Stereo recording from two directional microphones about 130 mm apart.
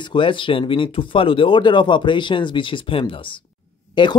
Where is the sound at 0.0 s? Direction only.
40° left (ahead or behind).